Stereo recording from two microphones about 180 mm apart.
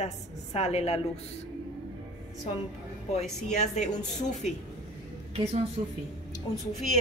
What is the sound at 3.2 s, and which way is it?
Speech, 40° left (ahead or behind).